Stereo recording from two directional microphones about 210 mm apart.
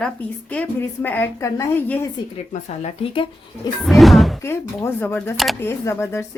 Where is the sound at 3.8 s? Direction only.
Centre (ahead or behind).